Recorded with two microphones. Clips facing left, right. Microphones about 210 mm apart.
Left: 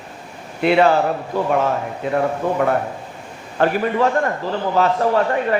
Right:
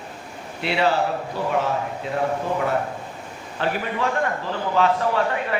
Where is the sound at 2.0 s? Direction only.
55° left (ahead or behind).